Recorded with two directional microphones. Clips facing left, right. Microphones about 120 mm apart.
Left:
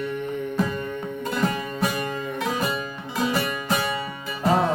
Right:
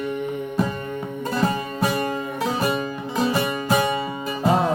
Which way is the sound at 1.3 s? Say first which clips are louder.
Right 3 dB; 30° right (ahead or behind).